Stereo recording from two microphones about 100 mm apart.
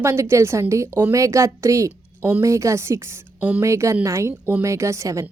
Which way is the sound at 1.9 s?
15° right (ahead or behind).